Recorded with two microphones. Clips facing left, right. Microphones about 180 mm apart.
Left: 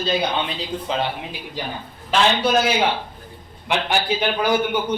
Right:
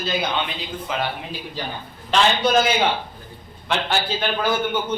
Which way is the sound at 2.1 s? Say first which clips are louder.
Even; 5° left (ahead or behind).